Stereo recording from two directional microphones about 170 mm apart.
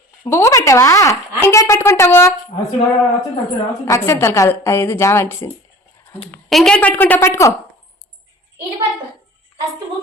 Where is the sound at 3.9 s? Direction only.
15° left (ahead or behind).